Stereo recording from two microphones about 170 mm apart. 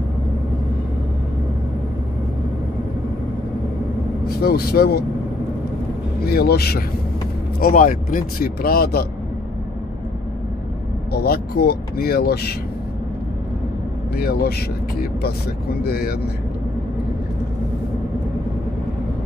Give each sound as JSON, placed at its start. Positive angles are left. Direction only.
{"t": 4.4, "sound": "speech", "side_deg": 65}
{"t": 6.2, "sound": "speech", "side_deg": 65}
{"t": 7.6, "sound": "speech", "side_deg": 55}
{"t": 11.1, "sound": "speech", "side_deg": 65}
{"t": 14.1, "sound": "speech", "side_deg": 65}
{"t": 15.8, "sound": "speech", "side_deg": 65}